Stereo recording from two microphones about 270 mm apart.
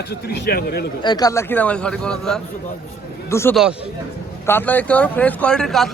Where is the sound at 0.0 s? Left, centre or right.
Left.